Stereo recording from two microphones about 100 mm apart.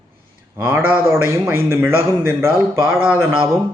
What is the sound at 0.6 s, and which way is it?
A man's voice, 20° right (ahead or behind).